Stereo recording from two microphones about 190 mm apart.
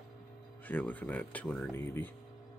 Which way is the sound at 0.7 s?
10° left (ahead or behind).